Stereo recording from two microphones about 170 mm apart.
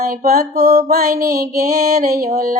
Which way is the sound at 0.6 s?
65° right (ahead or behind).